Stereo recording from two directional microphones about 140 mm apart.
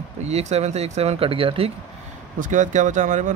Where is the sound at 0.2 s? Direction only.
50° right (ahead or behind).